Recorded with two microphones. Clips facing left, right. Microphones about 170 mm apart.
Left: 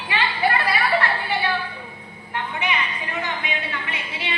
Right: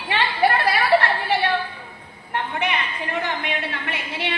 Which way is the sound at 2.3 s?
55° right (ahead or behind).